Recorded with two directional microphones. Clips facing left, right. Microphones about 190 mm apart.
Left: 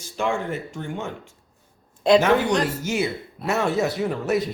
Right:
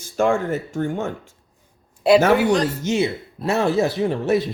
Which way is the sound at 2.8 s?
25° right (ahead or behind).